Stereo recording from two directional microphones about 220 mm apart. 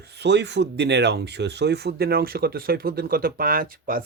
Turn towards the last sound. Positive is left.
turn(degrees=-40)  # may be behind; listen again after turning